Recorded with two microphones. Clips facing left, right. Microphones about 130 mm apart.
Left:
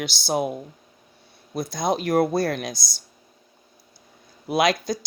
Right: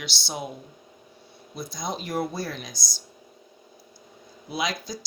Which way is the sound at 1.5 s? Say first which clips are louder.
Left 8 dB; 65° left (ahead or behind).